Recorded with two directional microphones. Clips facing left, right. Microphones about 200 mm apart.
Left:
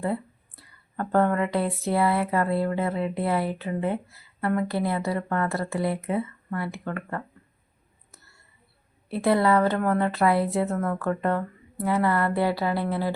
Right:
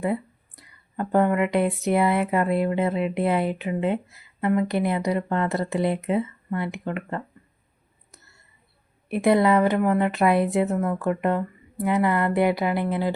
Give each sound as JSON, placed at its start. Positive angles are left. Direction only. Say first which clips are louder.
{"t": 0.0, "sound": "a sound", "louder": "right 2 dB", "side_deg": -15}
{"t": 1.8, "sound": "speech", "louder": "right 2 dB", "side_deg": -20}
{"t": 9.0, "sound": "a woman's voice", "louder": "right 3 dB", "side_deg": -15}